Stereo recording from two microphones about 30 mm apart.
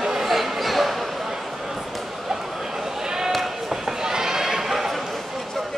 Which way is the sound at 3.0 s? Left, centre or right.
Centre.